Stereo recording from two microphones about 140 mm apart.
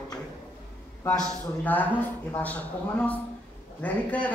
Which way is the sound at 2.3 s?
10° left (ahead or behind).